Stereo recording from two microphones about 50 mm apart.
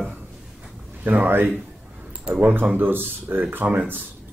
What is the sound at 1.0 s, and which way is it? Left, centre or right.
Speech, right.